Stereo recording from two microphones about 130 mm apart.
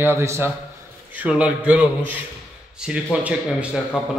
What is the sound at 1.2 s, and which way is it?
A man's voice, 10° right (ahead or behind).